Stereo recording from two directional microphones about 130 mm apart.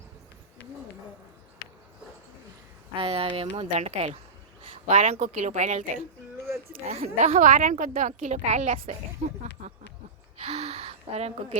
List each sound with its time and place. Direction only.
2.9 s speech: 45° right (ahead or behind)
4.9 s a woman's voice: 70° right (ahead or behind)
7.0 s a woman's voice: 60° right (ahead or behind)
10.3 s gasp: 55° right (ahead or behind)